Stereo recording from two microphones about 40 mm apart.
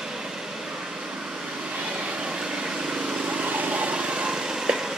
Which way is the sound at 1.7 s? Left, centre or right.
Right.